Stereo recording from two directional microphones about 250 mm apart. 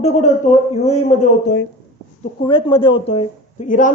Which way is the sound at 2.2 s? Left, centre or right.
Left.